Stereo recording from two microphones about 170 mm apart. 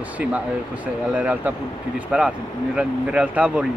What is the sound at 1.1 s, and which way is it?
Speech, 10° right (ahead or behind).